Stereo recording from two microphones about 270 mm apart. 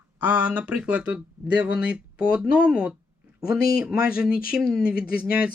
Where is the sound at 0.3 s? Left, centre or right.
Centre.